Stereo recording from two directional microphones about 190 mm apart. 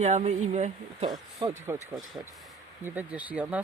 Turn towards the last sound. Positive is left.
turn(degrees=-5)  # may be behind; listen again after turning